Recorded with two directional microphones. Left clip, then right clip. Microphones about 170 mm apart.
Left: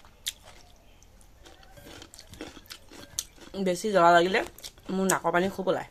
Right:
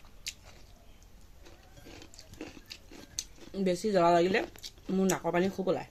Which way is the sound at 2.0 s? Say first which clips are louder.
Left 2 dB; 15° right (ahead or behind).